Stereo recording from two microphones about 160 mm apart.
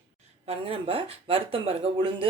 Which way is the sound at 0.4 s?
35° right (ahead or behind).